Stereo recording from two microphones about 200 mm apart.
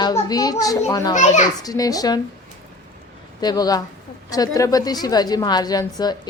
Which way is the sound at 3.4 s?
20° left (ahead or behind).